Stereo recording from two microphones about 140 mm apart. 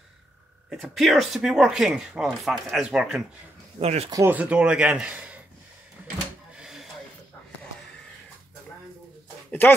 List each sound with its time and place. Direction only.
0.7 s speech: centre (ahead or behind)
3.8 s speech: 50° right (ahead or behind)
4.1 s speech: 15° right (ahead or behind)
6.5 s a sound: 5° right (ahead or behind)
9.5 s speech: 15° left (ahead or behind)